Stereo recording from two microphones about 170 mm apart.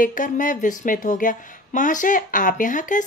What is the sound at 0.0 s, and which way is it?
Speech, 50° left (ahead or behind).